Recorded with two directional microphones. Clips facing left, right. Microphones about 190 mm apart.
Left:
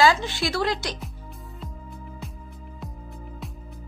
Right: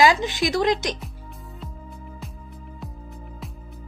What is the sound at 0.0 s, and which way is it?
Speech, 15° right (ahead or behind).